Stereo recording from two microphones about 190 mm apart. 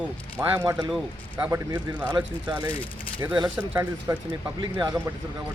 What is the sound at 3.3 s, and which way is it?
Speech, 20° right (ahead or behind).